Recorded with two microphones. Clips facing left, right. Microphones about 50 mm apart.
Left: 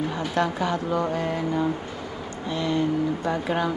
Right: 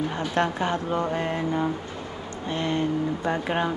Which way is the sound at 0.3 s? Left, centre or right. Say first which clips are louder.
Even; right.